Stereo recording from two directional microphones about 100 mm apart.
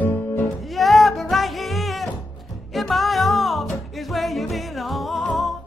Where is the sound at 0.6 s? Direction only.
Centre (ahead or behind).